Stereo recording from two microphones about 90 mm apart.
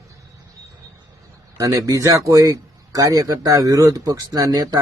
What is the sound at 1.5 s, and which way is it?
A man's voice, 40° right (ahead or behind).